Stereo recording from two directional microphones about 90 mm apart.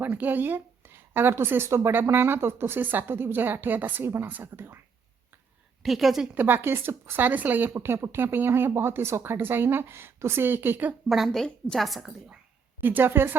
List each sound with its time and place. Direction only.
0.0 s speech: 20° right (ahead or behind)
5.8 s a woman's voice: centre (ahead or behind)
6.3 s speech: 25° right (ahead or behind)
11.1 s a woman's voice: centre (ahead or behind)
12.8 s speech: 25° right (ahead or behind)